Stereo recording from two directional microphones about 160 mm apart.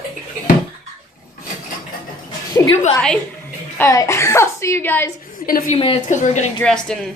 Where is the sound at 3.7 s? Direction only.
15° left (ahead or behind).